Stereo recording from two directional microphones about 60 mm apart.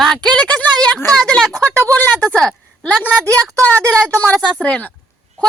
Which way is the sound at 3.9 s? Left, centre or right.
Left.